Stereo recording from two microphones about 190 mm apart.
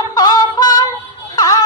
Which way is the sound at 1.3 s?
20° left (ahead or behind).